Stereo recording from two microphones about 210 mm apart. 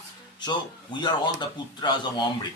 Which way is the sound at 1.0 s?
20° left (ahead or behind).